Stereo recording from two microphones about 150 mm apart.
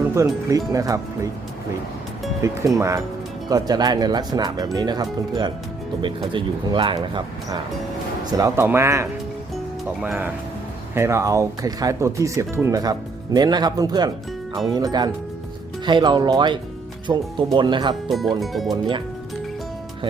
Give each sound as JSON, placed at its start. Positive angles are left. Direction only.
{"t": 0.1, "sound": "speech", "side_deg": -20}
{"t": 2.4, "sound": "speech", "side_deg": -20}
{"t": 6.3, "sound": "speech", "side_deg": -35}
{"t": 18.1, "sound": "speech", "side_deg": 0}
{"t": 18.7, "sound": "speech", "side_deg": -30}